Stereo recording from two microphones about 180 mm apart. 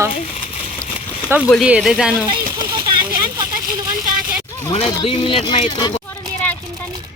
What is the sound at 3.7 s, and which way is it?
Vehicle, 15° right (ahead or behind).